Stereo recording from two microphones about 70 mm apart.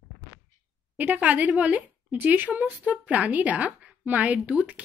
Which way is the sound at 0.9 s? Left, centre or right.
Right.